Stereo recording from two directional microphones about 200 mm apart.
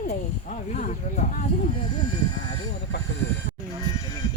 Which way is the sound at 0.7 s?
40° left (ahead or behind).